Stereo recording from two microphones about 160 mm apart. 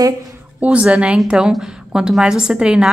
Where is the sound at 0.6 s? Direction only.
5° right (ahead or behind).